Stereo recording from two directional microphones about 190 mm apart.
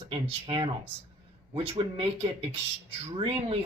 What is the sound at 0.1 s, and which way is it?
Speech, 30° right (ahead or behind).